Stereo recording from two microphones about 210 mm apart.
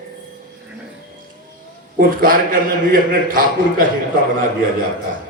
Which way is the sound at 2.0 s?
40° right (ahead or behind).